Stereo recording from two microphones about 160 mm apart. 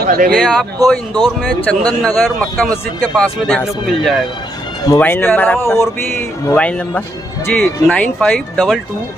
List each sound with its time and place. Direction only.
0.0 s speech: 65° right (ahead or behind)
0.4 s speech: 5° left (ahead or behind)
0.7 s speech: 25° right (ahead or behind)
1.4 s speech: 5° left (ahead or behind)
4.8 s speech: 15° left (ahead or behind)